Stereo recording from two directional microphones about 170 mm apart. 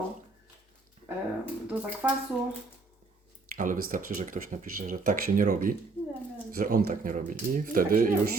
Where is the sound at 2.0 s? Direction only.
10° right (ahead or behind).